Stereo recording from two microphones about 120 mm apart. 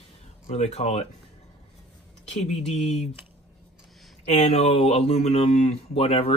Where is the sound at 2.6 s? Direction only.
60° left (ahead or behind).